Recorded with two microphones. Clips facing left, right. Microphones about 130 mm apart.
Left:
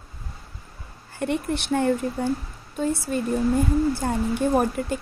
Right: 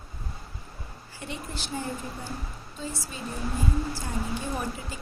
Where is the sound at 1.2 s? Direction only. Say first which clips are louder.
Left 12 dB; 60° left (ahead or behind).